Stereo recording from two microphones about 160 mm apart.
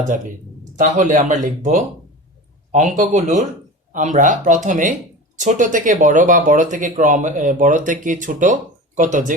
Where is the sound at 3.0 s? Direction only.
50° right (ahead or behind).